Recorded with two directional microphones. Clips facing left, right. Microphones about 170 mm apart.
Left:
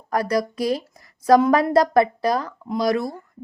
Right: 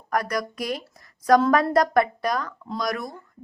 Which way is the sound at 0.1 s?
30° left (ahead or behind).